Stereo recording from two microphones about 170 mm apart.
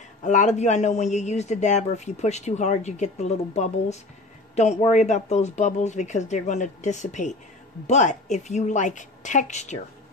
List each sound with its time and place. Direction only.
0.2 s a man's voice: 45° left (ahead or behind)